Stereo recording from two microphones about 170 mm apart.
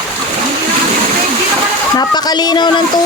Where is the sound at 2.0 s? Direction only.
25° left (ahead or behind).